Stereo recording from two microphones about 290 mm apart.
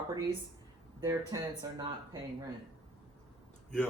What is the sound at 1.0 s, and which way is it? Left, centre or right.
Speech, centre.